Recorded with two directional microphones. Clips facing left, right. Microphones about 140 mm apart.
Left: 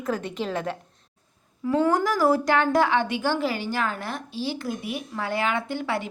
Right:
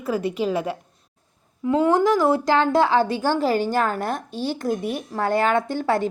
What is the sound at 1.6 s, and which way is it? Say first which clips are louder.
A woman's voice: right 4 dB; 25° right (ahead or behind).